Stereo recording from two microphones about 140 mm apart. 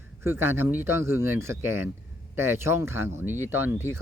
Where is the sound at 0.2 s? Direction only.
15° right (ahead or behind).